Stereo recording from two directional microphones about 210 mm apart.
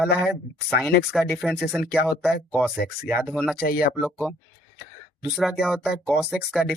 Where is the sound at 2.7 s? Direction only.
45° left (ahead or behind).